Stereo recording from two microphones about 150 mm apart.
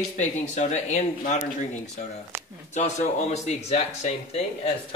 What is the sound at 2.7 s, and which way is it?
Speech, 50° left (ahead or behind).